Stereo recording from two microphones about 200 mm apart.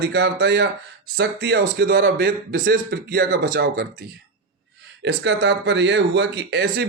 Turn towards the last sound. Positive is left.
turn(degrees=-55)  # may be behind; listen again after turning